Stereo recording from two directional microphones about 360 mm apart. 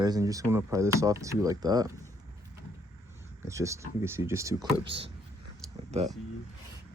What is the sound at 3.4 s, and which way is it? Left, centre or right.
Speech, centre.